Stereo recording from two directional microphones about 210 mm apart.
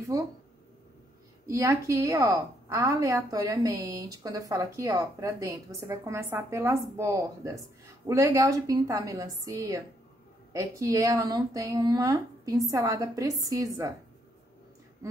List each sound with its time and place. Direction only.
0.1 s a woman's voice: 15° right (ahead or behind)
1.5 s a woman's voice: 15° right (ahead or behind)